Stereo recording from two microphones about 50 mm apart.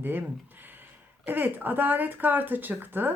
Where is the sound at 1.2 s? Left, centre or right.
Right.